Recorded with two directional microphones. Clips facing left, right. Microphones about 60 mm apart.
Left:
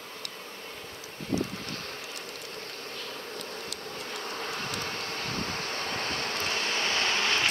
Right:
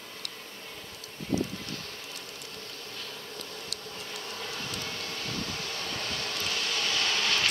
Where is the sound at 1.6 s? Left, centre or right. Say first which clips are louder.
Left 2 dB; left.